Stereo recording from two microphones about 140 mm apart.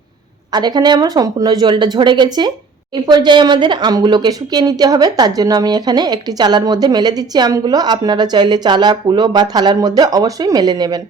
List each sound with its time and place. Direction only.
0.5 s speech: 30° right (ahead or behind)